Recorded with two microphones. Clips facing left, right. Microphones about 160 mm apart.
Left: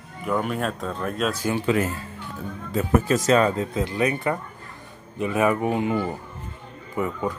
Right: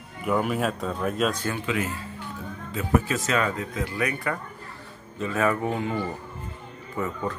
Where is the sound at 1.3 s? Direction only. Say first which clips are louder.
Left 5 dB; 10° left (ahead or behind).